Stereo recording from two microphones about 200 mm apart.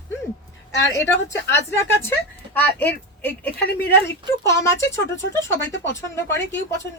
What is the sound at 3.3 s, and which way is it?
Speech, 55° left (ahead or behind).